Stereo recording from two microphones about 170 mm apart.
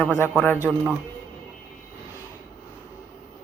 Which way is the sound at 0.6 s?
10° right (ahead or behind).